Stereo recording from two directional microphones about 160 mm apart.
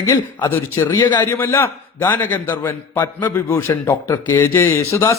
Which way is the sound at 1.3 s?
15° left (ahead or behind).